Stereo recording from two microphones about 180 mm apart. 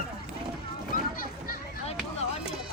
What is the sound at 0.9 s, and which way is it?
Children playing, 55° left (ahead or behind).